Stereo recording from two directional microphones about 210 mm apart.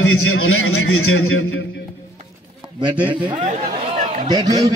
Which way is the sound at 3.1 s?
25° right (ahead or behind).